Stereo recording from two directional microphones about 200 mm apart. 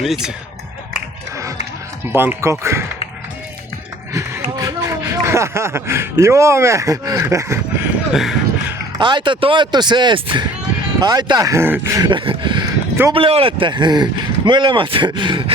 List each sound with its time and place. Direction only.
0.0 s speech: centre (ahead or behind)
2.1 s speech: 10° right (ahead or behind)
4.1 s speech: 15° right (ahead or behind)
8.1 s a sound: centre (ahead or behind)
9.0 s speech: 25° right (ahead or behind)